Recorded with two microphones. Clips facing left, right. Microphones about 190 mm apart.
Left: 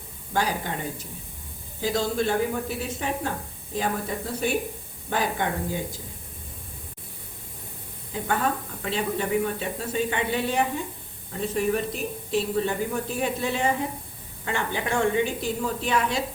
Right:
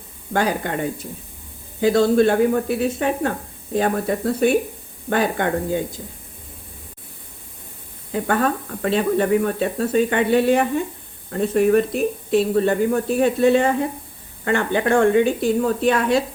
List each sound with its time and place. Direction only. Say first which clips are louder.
0.3 s speech: right 6 dB; 60° right (ahead or behind)
8.1 s speech: right 6 dB; 60° right (ahead or behind)